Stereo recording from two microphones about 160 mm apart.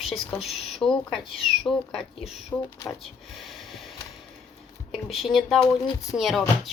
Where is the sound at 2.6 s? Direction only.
20° left (ahead or behind).